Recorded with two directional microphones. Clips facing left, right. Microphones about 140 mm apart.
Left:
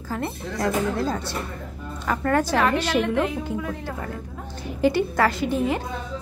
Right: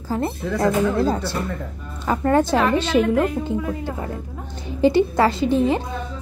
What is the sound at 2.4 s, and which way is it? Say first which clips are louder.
A woman's voice: right 2 dB; centre (ahead or behind).